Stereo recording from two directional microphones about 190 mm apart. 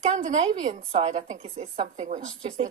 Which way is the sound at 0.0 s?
40° right (ahead or behind).